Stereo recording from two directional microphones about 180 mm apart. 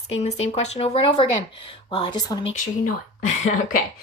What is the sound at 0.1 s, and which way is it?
Speech, 35° left (ahead or behind).